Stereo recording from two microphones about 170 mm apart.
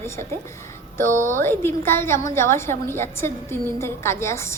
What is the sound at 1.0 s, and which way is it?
A woman's voice, 15° left (ahead or behind).